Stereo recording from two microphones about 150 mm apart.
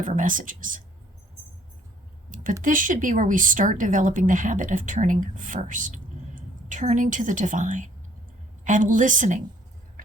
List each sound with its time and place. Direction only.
0.0 s speech: 60° right (ahead or behind)
2.3 s a sound: 60° right (ahead or behind)
2.6 s speech: 60° right (ahead or behind)